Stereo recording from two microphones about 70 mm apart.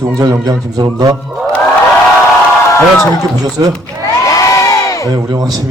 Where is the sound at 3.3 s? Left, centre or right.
Right.